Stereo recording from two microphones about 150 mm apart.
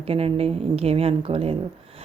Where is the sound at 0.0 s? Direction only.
40° right (ahead or behind).